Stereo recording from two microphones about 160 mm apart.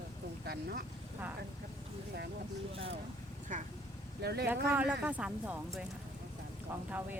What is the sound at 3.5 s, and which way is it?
Speech, 50° right (ahead or behind).